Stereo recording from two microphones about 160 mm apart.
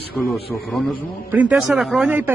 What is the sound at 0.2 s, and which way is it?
Speech, 10° left (ahead or behind).